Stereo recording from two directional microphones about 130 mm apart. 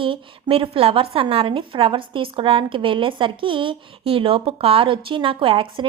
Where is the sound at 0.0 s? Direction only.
40° right (ahead or behind).